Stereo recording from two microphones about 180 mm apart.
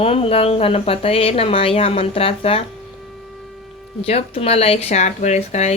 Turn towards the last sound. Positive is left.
turn(degrees=40)  # may be behind; listen again after turning